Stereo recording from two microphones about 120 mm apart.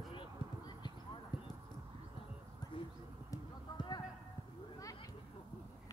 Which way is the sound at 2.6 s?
35° left (ahead or behind).